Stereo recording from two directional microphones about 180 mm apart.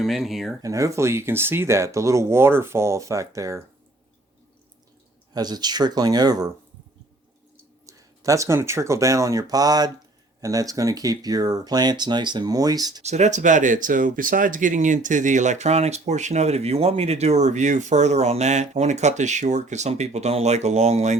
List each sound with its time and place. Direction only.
0.0 s speech: centre (ahead or behind)
0.6 s speech: 20° right (ahead or behind)
5.3 s speech: 20° right (ahead or behind)
7.9 s speech: 20° right (ahead or behind)
13.0 s speech: 40° right (ahead or behind)